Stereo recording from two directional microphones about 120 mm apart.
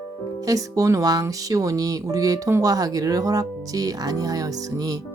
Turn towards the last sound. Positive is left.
turn(degrees=-30)  # may be behind; listen again after turning